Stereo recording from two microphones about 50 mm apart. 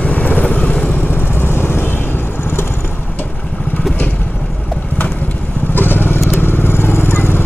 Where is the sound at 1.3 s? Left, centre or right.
Left.